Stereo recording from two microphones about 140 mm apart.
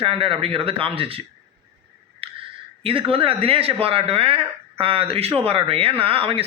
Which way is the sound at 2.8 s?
40° right (ahead or behind).